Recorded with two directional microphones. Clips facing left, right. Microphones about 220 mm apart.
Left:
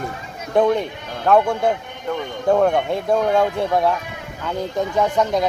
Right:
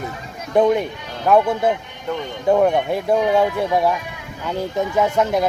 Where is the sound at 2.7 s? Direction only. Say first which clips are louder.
Right 1 dB; 5° right (ahead or behind).